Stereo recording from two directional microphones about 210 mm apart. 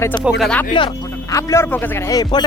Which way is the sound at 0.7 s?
20° left (ahead or behind).